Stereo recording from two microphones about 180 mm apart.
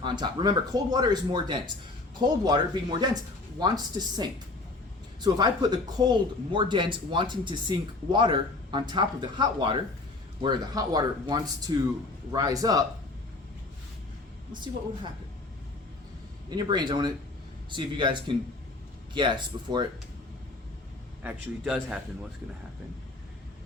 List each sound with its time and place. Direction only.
0.0 s speech: 25° right (ahead or behind)
3.6 s speech: 25° right (ahead or behind)
14.5 s speech: 25° right (ahead or behind)
16.5 s speech: 25° right (ahead or behind)
21.2 s a man's voice: 5° right (ahead or behind)